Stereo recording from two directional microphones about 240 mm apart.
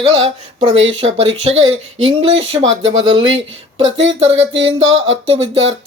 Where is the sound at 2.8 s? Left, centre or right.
Right.